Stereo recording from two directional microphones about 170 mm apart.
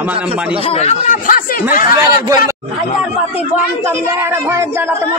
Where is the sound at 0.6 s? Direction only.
35° left (ahead or behind); by 1.6 s 55° left (ahead or behind).